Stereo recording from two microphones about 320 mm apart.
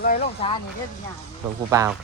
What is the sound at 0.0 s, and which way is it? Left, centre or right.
Speech, left.